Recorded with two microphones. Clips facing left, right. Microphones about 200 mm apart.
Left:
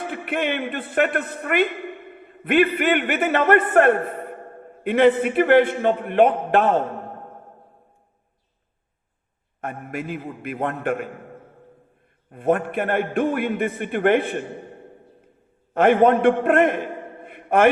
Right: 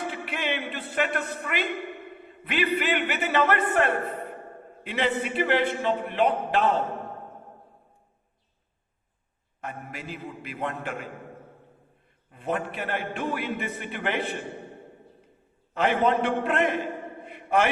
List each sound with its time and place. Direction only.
0.1 s a man's voice: 55° left (ahead or behind)
9.6 s a man's voice: 55° left (ahead or behind)
12.3 s a man's voice: 55° left (ahead or behind)
15.7 s a man's voice: 55° left (ahead or behind)
17.2 s a sound: 55° left (ahead or behind)